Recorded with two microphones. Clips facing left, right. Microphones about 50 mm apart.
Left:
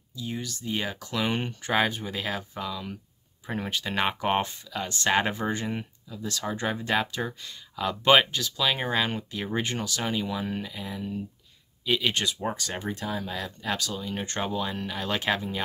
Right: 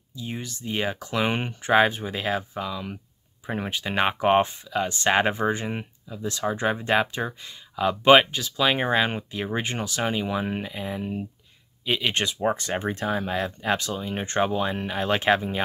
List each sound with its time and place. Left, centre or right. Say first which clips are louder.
0.1 s speech: even; right